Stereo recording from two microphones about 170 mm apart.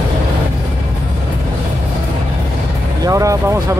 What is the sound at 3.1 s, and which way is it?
Vehicle, 20° right (ahead or behind).